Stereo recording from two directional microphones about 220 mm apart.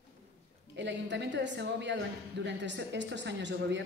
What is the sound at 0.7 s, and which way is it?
A woman's voice, 55° right (ahead or behind).